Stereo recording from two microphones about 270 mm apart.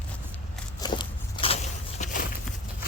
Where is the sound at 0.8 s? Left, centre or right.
Centre.